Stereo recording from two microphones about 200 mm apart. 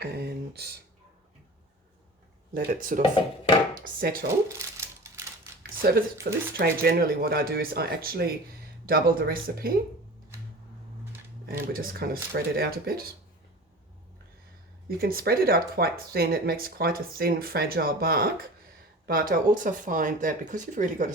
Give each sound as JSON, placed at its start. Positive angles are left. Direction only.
{"t": 0.0, "sound": "a sound", "side_deg": -55}
{"t": 2.6, "sound": "speech", "side_deg": -45}
{"t": 4.4, "sound": "a sound", "side_deg": -15}
{"t": 5.8, "sound": "speech", "side_deg": -50}
{"t": 11.4, "sound": "speech", "side_deg": -45}
{"t": 14.8, "sound": "speech", "side_deg": -45}